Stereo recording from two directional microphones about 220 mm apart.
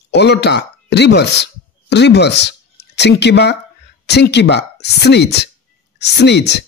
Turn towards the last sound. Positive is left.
turn(degrees=50)  # may be behind; listen again after turning